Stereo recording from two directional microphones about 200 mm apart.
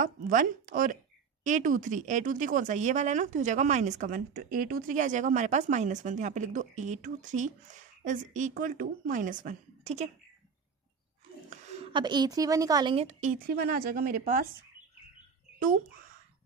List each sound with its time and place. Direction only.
0.0 s a woman's voice: 45° right (ahead or behind)
11.5 s speech: 25° right (ahead or behind)
12.9 s a woman's voice: 35° right (ahead or behind)